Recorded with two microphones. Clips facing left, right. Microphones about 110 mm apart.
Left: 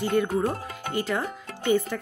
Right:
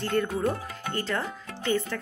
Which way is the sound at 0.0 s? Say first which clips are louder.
Left 2 dB; 5° left (ahead or behind).